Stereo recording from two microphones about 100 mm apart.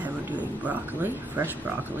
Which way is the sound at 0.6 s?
15° right (ahead or behind).